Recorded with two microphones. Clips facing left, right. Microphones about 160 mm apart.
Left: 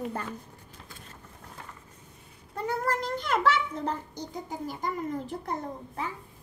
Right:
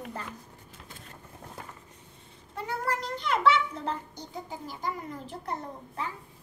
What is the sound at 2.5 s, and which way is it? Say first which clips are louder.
A child's voice: left 3 dB; 45° left (ahead or behind).